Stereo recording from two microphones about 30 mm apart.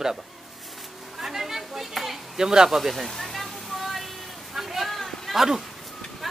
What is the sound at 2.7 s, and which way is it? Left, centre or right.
Speech, centre.